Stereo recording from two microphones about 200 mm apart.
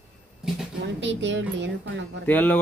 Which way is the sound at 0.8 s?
65° right (ahead or behind).